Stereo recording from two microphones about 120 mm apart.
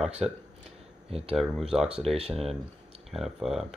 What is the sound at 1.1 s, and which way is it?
Speech, 55° right (ahead or behind).